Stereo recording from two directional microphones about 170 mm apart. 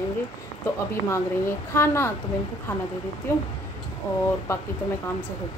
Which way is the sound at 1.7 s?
15° left (ahead or behind).